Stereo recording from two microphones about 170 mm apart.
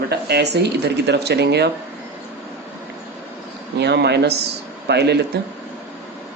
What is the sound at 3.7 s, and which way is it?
Speech, 80° right.